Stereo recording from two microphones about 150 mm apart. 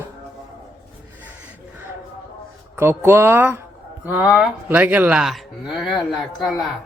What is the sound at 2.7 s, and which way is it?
Speech, 15° right (ahead or behind).